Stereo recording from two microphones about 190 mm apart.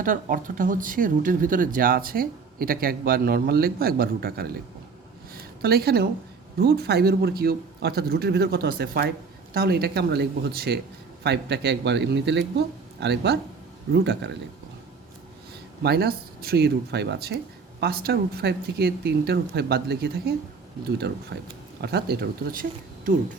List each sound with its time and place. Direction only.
0.0 s speech: 45° right (ahead or behind)
5.3 s a sound: 55° right (ahead or behind)
6.6 s a man's voice: 55° right (ahead or behind)
15.8 s a man's voice: 55° right (ahead or behind)
21.8 s a man's voice: 60° right (ahead or behind)